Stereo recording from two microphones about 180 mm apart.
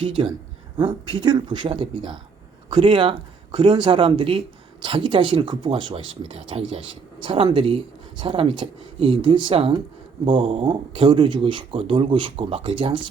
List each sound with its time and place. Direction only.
0.0 s speech: 30° right (ahead or behind)